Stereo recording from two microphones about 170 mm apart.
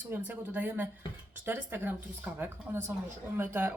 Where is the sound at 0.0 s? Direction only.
10° right (ahead or behind).